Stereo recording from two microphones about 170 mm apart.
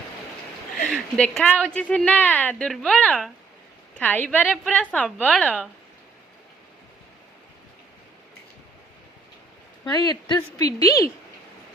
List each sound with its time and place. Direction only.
0.9 s a woman's voice: 5° left (ahead or behind)
9.8 s a woman's voice: 25° left (ahead or behind)